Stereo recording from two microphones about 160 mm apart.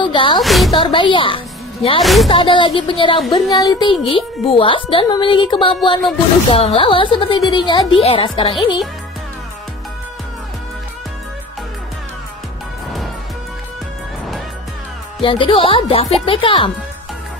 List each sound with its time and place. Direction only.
0.0 s music: 30° left (ahead or behind)
0.4 s a woman's voice: centre (ahead or behind)
0.7 s a woman's voice: 30° left (ahead or behind)
2.0 s a woman's voice: centre (ahead or behind)
2.2 s a woman's voice: 30° left (ahead or behind)
15.2 s a woman's voice: 30° left (ahead or behind)